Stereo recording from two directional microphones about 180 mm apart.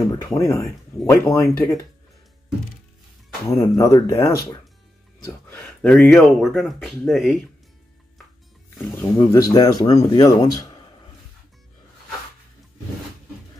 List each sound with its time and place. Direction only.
0.2 s speech: 15° left (ahead or behind)
3.5 s speech: 20° left (ahead or behind)
5.5 s speech: 5° left (ahead or behind)
8.9 s speech: 20° left (ahead or behind)